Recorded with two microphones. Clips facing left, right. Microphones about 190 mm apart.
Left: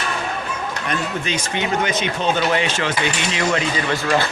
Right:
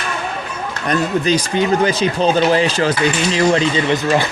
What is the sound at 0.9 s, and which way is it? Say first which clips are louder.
Speech: right 9 dB; 35° right (ahead or behind).